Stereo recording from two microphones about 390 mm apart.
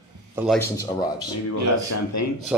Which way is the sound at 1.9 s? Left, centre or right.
Left.